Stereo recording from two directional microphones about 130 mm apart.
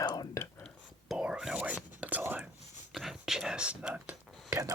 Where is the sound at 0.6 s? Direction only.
5° right (ahead or behind).